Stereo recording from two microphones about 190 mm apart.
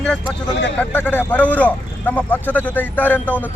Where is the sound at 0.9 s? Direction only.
10° left (ahead or behind).